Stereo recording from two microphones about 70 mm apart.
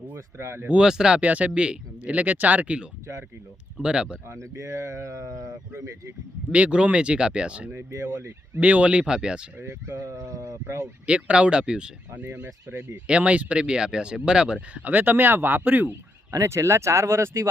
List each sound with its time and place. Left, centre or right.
0.1 s speech: right
0.7 s speech: centre
3.8 s speech: centre
4.3 s speech: right
6.5 s speech: centre
7.9 s speech: right
8.5 s speech: right
9.6 s speech: right
9.9 s speech: right
11.0 s speech: centre
12.2 s speech: right
13.1 s speech: centre
16.3 s speech: right